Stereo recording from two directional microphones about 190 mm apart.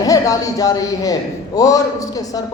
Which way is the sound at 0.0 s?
20° left (ahead or behind).